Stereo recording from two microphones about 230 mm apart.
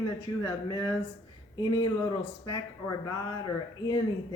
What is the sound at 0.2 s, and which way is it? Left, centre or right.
A woman's voice, centre.